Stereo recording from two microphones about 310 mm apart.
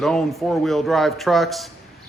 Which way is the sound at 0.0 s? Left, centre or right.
Centre.